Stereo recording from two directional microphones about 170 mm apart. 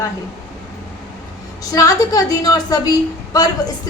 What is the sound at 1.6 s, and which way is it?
A woman's voice, 20° left (ahead or behind).